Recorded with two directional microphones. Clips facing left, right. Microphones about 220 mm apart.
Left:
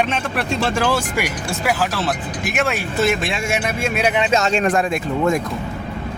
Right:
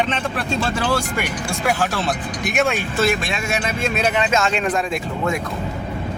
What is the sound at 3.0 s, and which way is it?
Speech, 25° left (ahead or behind).